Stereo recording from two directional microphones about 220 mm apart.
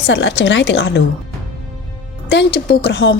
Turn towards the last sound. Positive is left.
turn(degrees=55)  # may be behind; listen again after turning